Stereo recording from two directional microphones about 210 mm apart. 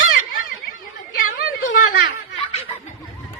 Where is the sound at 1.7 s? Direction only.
45° left (ahead or behind).